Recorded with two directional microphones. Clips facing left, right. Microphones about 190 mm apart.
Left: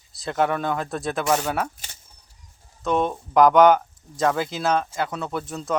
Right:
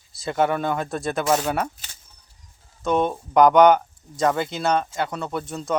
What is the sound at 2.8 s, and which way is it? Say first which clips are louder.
Speech: right 1 dB; centre (ahead or behind).